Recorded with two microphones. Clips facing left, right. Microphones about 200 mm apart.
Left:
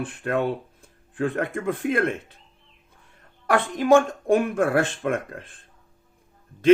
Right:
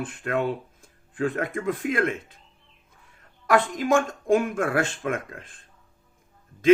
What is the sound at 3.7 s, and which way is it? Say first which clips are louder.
Speech: left 5 dB; 60° left (ahead or behind).